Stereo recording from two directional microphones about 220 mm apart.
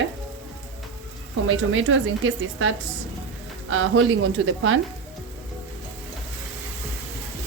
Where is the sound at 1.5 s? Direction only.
65° right (ahead or behind).